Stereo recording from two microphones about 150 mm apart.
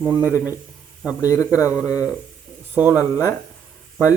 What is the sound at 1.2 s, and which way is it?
Speech, 20° left (ahead or behind).